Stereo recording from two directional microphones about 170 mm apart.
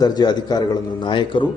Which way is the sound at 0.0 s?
25° left (ahead or behind).